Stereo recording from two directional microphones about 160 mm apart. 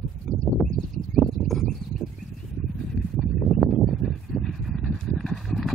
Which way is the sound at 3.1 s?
Centre (ahead or behind).